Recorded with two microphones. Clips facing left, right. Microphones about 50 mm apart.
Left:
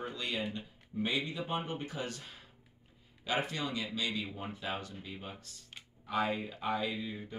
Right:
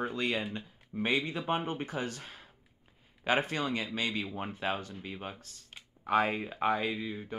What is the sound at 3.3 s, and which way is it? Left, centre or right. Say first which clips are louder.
Speech: right 5 dB; right.